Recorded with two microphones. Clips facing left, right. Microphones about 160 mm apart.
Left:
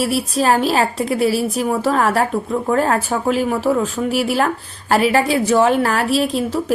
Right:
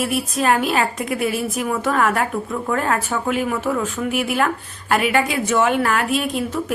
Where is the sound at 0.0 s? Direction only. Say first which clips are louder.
Left 3 dB; 30° left (ahead or behind).